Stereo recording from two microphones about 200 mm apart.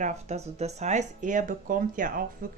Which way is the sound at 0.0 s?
35° right (ahead or behind).